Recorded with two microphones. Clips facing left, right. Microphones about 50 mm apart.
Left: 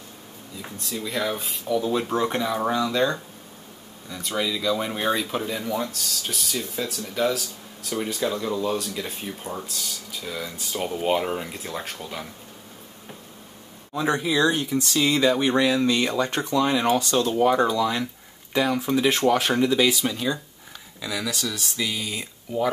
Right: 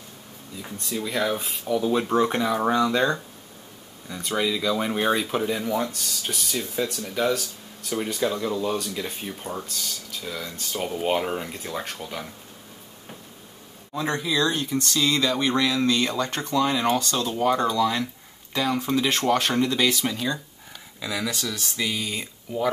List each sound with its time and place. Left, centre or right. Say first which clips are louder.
0.6 s speech: right 2 dB; centre
13.9 s speech: left 3 dB; centre
14.2 s speech: left 1 dB; left
20.0 s speech: left 1 dB; centre